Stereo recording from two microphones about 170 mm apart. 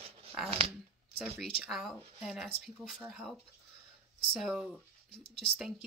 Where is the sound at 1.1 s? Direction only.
5° right (ahead or behind).